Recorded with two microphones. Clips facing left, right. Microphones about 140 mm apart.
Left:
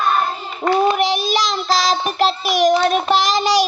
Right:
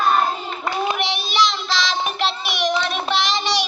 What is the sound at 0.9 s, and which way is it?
Child singing, 45° left (ahead or behind).